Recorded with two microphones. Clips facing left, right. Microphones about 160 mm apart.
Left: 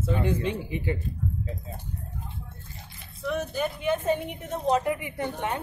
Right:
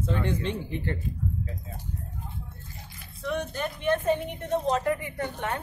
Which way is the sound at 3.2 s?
5° left (ahead or behind).